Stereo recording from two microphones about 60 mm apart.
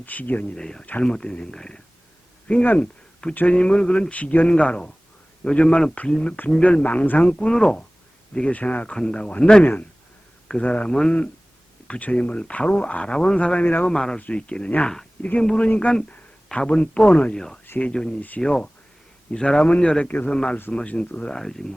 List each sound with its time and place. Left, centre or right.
0.0 s speech: left
0.5 s speech: centre
2.6 s speech: left
17.3 s speech: centre
20.1 s speech: left
21.3 s speech: centre